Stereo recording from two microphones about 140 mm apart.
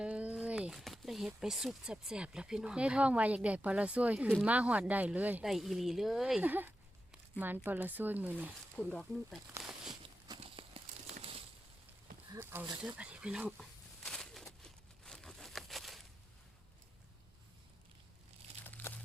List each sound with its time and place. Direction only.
0.0 s speech: 10° right (ahead or behind)
8.7 s speech: 5° left (ahead or behind)
9.9 s walk: 35° right (ahead or behind)
11.1 s crushing: 45° right (ahead or behind)
12.3 s a sound: 15° right (ahead or behind); by 16.0 s centre (ahead or behind)
18.6 s crumpling: 15° left (ahead or behind)